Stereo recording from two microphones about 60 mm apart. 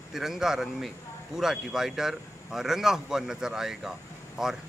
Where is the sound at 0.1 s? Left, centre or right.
Centre.